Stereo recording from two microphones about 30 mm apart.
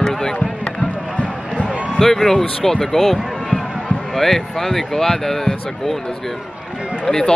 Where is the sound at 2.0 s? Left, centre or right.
Centre.